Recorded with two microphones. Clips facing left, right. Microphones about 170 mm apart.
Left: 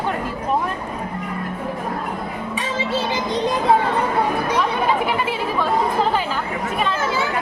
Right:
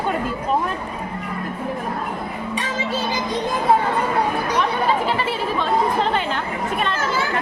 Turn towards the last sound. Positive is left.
turn(degrees=5)  # may be behind; listen again after turning